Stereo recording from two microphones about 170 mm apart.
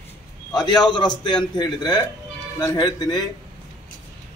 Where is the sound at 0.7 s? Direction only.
25° left (ahead or behind).